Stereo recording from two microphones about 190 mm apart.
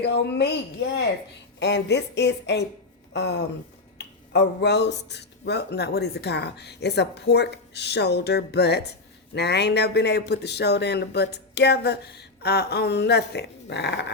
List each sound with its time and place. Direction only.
0.0 s speech: 60° left (ahead or behind)
1.5 s speech: 65° left (ahead or behind)